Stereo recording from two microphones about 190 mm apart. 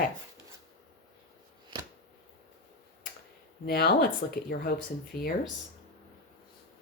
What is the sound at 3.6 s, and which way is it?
Speech, 55° left (ahead or behind).